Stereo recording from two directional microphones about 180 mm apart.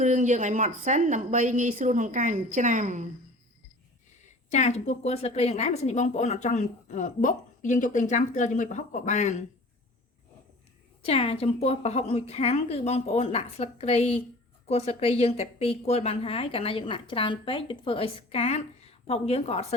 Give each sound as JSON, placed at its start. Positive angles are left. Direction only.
{"t": 0.0, "sound": "a woman's voice", "side_deg": -40}
{"t": 4.3, "sound": "a woman's voice", "side_deg": 40}
{"t": 11.0, "sound": "a woman's voice", "side_deg": 30}